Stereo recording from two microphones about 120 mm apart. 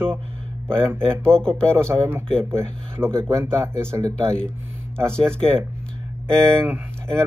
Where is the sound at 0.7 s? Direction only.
20° right (ahead or behind).